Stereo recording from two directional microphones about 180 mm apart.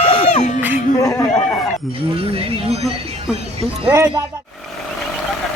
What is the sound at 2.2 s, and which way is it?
Speech, 30° right (ahead or behind).